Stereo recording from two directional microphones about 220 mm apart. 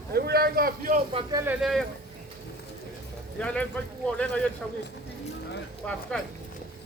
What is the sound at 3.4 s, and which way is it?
Speech, 5° left (ahead or behind).